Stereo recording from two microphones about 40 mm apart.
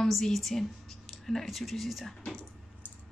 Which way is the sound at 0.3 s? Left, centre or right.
Centre.